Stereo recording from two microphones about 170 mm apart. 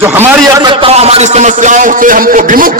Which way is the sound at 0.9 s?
40° right (ahead or behind).